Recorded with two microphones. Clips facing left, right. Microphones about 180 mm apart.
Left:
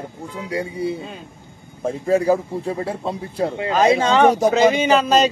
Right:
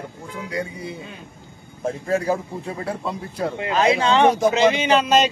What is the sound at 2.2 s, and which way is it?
Speech, 35° left (ahead or behind).